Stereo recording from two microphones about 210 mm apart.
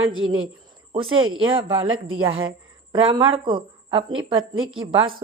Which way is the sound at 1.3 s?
25° right (ahead or behind).